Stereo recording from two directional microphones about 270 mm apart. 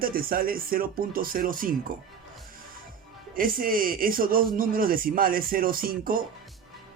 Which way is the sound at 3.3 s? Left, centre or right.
Right.